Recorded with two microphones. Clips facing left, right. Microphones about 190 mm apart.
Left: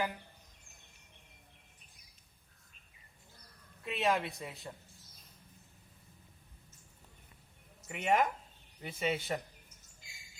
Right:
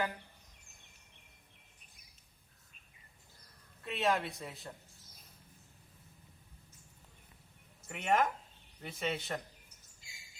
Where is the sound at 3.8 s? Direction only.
Centre (ahead or behind).